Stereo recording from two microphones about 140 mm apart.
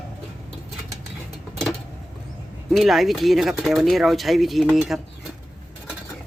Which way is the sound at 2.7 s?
Centre (ahead or behind).